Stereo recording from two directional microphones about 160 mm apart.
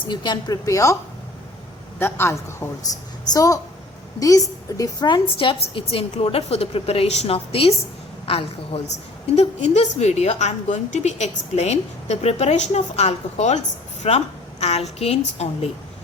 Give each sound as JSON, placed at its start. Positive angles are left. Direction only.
{"t": 0.1, "sound": "a woman's voice", "side_deg": 25}
{"t": 2.0, "sound": "a man's voice", "side_deg": 15}